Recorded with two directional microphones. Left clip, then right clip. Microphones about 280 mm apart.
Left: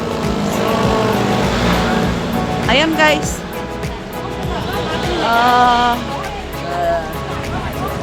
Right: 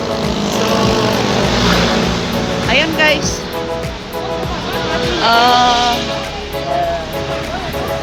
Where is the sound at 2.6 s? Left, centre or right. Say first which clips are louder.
Even; centre.